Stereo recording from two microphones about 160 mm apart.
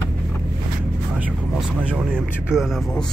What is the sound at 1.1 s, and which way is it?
Speech, 10° right (ahead or behind).